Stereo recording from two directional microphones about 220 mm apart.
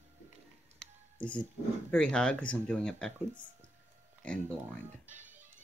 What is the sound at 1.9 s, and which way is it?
Speech, 5° left (ahead or behind).